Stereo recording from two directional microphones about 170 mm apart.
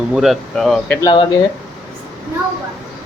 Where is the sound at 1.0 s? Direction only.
30° left (ahead or behind).